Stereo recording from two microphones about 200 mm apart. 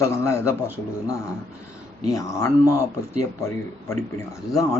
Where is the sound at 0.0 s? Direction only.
15° left (ahead or behind).